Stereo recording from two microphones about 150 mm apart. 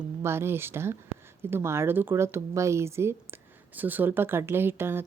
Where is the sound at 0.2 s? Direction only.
15° right (ahead or behind).